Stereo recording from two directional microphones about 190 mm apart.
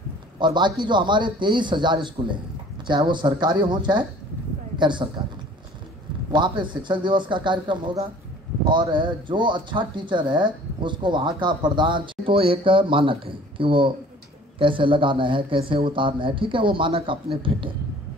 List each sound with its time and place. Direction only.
0.4 s speech: 25° right (ahead or behind)
6.3 s speech: 25° right (ahead or behind)